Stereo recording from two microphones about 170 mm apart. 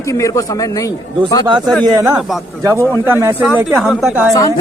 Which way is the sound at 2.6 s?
20° right (ahead or behind).